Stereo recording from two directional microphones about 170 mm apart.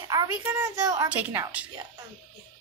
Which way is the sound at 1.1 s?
10° right (ahead or behind).